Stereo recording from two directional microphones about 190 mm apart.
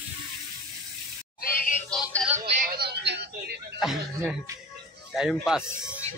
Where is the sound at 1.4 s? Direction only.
50° left (ahead or behind).